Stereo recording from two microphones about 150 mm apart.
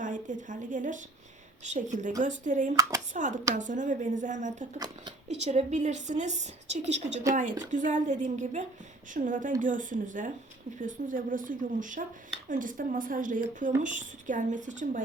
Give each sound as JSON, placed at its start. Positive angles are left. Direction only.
{"t": 0.0, "sound": "a woman's voice", "side_deg": -60}